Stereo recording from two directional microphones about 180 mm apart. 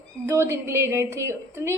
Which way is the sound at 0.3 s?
15° right (ahead or behind).